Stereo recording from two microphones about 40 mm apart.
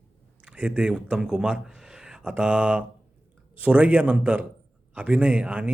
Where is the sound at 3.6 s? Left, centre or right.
Right.